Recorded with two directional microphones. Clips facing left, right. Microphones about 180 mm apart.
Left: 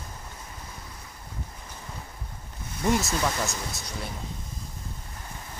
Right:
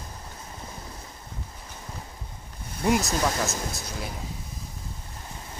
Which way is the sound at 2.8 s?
5° right (ahead or behind).